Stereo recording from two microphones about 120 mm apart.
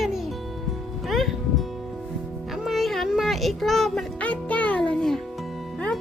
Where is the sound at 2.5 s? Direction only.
Centre (ahead or behind).